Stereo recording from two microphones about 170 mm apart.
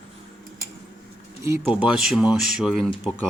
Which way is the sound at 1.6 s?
5° right (ahead or behind).